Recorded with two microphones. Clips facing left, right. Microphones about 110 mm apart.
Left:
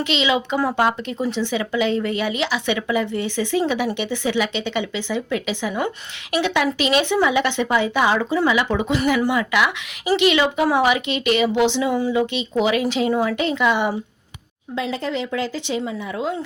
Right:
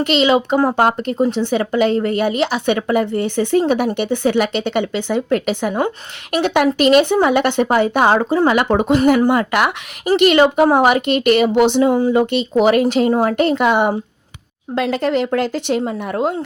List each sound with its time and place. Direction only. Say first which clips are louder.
0.0 s speech: right 6 dB; 50° right (ahead or behind)
14.8 s speech: right 7 dB; 65° right (ahead or behind)